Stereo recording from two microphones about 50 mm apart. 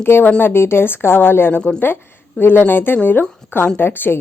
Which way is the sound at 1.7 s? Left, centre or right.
Left.